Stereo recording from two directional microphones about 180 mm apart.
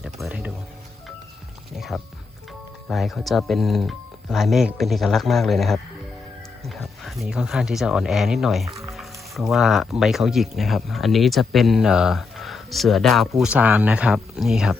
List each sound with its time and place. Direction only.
0.0 s music: 5° right (ahead or behind)
1.7 s music: centre (ahead or behind)
2.9 s speech: centre (ahead or behind)